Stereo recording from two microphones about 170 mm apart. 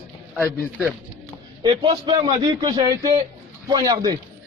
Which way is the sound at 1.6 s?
30° right (ahead or behind).